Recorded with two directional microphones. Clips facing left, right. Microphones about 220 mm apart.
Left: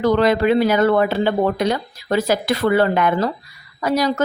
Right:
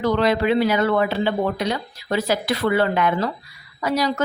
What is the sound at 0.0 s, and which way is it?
Speech, 45° left (ahead or behind).